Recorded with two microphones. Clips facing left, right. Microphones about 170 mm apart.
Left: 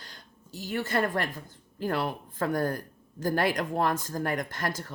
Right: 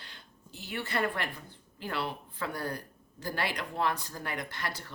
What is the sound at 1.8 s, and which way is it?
Speech, 45° left (ahead or behind).